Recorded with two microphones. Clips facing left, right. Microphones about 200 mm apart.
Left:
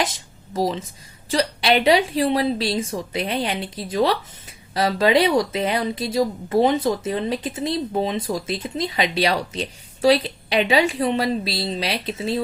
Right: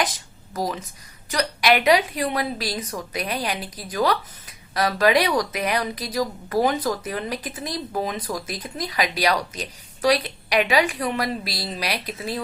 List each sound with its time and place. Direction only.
0.0 s speech: 25° left (ahead or behind)